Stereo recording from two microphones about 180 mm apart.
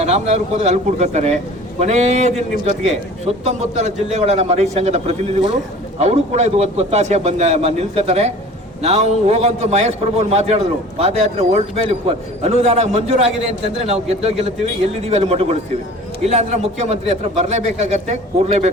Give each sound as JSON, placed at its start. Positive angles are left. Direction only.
{"t": 0.0, "sound": "a man's voice", "side_deg": -35}
{"t": 3.4, "sound": "a man's voice", "side_deg": -40}